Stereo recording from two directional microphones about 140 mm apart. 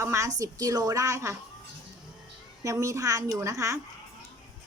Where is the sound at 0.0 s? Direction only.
20° right (ahead or behind).